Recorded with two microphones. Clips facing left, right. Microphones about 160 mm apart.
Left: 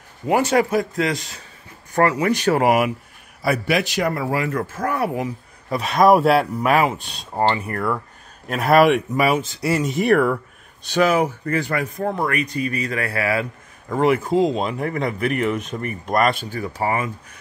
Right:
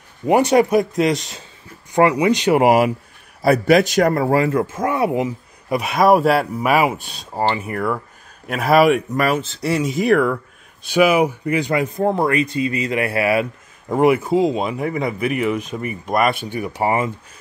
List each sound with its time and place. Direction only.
0.3 s speech: 20° right (ahead or behind)
3.4 s speech: 40° right (ahead or behind)
4.5 s speech: 20° right (ahead or behind)
5.8 s speech: 5° right (ahead or behind)
10.9 s speech: 10° right (ahead or behind)
12.0 s speech: 30° right (ahead or behind); by 16.3 s 5° right (ahead or behind)
16.4 s speech: 20° right (ahead or behind)